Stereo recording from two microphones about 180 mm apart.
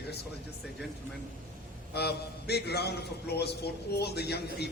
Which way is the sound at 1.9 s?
65° left (ahead or behind).